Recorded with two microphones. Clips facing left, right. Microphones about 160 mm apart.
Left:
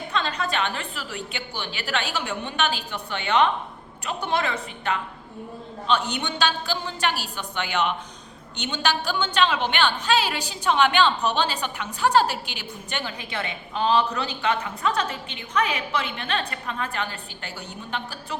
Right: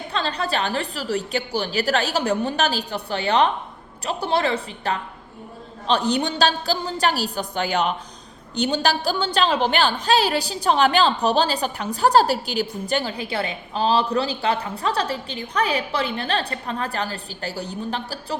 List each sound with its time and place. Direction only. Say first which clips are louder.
0.1 s a woman's voice: right 2 dB; 35° right (ahead or behind)